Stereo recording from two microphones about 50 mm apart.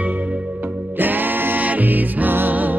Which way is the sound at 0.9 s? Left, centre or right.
Right.